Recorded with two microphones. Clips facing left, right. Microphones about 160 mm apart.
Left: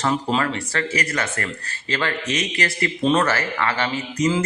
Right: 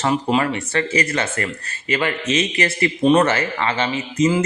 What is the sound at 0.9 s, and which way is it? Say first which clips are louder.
Speech: right 4 dB; 25° right (ahead or behind).